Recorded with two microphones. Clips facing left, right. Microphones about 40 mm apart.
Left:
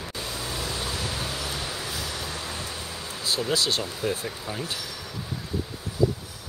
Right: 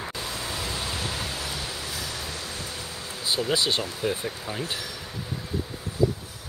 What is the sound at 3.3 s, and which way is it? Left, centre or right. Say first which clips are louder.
Speech: right 1 dB; centre.